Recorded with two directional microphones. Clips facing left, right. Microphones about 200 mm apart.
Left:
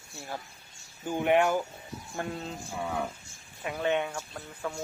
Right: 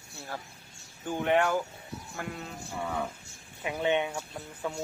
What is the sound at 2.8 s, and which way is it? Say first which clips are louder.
Speech: left 1 dB; 10° left (ahead or behind).